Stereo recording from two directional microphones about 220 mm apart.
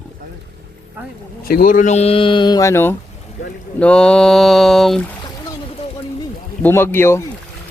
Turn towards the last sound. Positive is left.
turn(degrees=10)  # may be behind; listen again after turning